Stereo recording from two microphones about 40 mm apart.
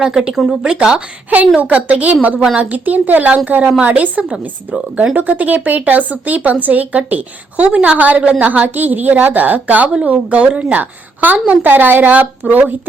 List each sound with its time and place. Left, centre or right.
0.0 s speech: centre
1.5 s a woman's voice: right
10.1 s a woman's voice: right